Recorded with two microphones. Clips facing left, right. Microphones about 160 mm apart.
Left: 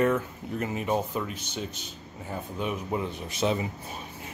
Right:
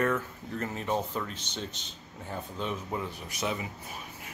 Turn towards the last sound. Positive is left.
turn(degrees=25)  # may be behind; listen again after turning